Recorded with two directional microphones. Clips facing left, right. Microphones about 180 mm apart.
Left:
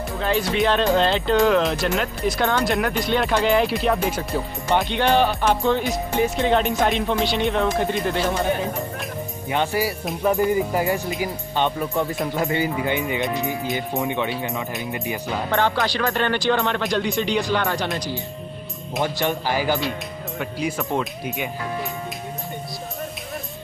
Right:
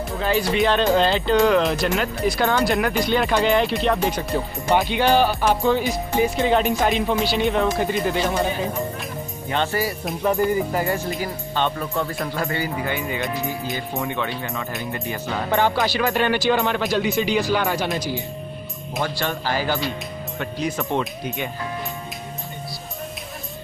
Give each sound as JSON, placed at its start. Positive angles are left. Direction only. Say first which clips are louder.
{"t": 0.2, "sound": "speech", "louder": "right 1 dB", "side_deg": 0}
{"t": 9.5, "sound": "speech", "louder": "left 1 dB", "side_deg": 10}
{"t": 10.0, "sound": "speech", "louder": "even", "side_deg": 0}
{"t": 11.1, "sound": "speech", "louder": "left 1 dB", "side_deg": 15}
{"t": 15.5, "sound": "speech", "louder": "right 2 dB", "side_deg": -15}
{"t": 19.1, "sound": "speech", "louder": "left 2 dB", "side_deg": 15}